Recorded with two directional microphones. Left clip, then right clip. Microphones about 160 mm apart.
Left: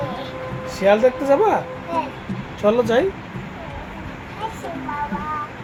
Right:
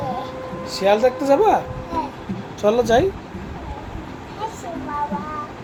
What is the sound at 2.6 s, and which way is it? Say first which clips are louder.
Speech: right 1 dB; 5° left (ahead or behind).